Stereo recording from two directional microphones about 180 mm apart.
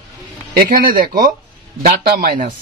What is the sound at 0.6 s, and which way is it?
Speech, 50° right (ahead or behind).